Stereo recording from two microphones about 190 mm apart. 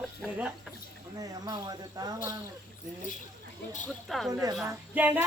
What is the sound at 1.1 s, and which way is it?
Speech, 20° right (ahead or behind).